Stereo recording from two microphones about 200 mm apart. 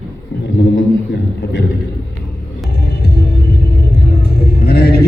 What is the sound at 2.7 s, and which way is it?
Music, 55° left (ahead or behind).